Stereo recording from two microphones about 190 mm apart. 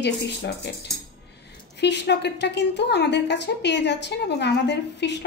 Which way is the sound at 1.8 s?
65° left (ahead or behind).